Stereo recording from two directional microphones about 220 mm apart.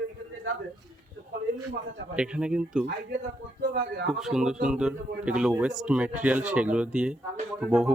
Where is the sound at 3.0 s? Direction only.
45° right (ahead or behind).